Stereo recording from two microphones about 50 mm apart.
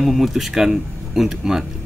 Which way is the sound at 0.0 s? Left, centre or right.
Centre.